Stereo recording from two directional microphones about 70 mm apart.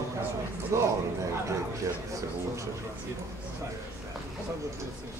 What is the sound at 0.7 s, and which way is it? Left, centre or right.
Speech, right.